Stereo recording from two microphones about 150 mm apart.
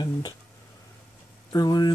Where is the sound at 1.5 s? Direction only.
25° left (ahead or behind).